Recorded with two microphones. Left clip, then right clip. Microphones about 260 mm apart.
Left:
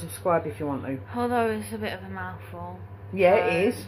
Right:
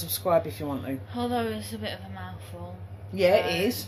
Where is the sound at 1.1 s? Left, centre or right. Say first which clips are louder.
Left 5 dB; centre.